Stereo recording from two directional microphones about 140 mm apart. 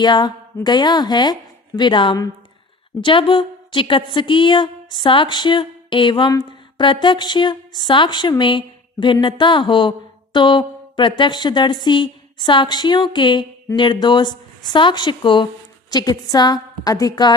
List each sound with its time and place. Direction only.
0.0 s a woman's voice: 30° left (ahead or behind)